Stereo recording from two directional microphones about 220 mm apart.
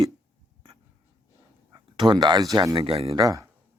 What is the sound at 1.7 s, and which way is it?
Speech, 20° right (ahead or behind).